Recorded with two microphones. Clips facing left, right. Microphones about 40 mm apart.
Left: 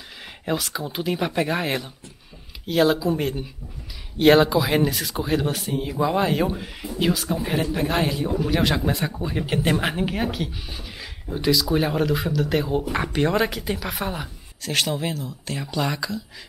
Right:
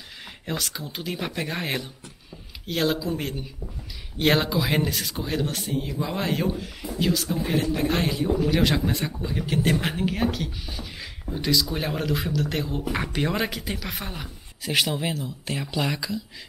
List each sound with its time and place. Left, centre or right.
0.5 s speech: centre
6.5 s speech: centre
9.2 s speech: centre
14.6 s speech: centre
15.6 s speech: centre